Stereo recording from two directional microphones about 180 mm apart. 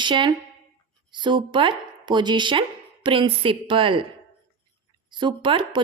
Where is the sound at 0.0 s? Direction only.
25° right (ahead or behind).